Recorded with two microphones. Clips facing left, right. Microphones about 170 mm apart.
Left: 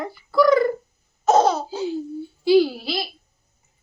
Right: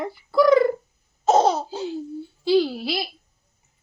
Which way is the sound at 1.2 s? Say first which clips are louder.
Left 1 dB; 30° right (ahead or behind).